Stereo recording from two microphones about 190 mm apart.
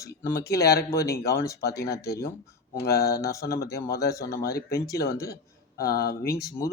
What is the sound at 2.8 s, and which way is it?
Speech, 55° left (ahead or behind).